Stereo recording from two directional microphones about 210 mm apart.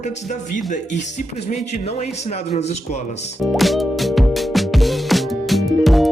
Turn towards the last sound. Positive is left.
turn(degrees=0)  # may be behind; listen again after turning